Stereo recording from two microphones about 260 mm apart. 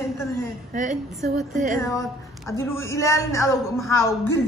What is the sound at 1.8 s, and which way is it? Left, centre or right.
Speech, centre.